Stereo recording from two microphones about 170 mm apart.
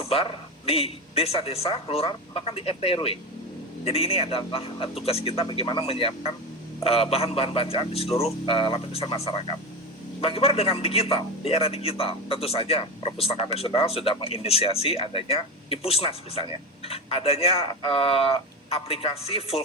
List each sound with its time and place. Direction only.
0.0 s a man's voice: 35° left (ahead or behind)